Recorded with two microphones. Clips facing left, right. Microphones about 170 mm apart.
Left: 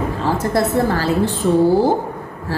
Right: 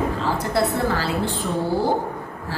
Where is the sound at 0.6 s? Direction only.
45° left (ahead or behind).